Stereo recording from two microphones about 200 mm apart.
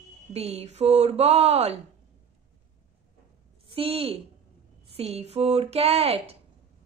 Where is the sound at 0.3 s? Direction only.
30° right (ahead or behind).